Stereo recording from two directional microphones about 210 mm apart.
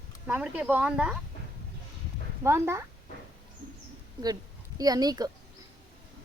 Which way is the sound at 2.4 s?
10° right (ahead or behind).